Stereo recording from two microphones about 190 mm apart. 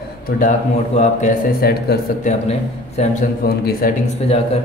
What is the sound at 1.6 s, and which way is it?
Speech, 55° left (ahead or behind).